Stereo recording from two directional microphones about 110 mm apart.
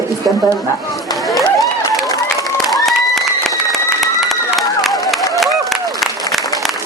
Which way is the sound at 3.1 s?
Centre (ahead or behind).